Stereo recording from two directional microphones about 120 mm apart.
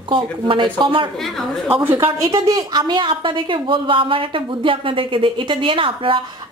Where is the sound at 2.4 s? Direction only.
35° right (ahead or behind).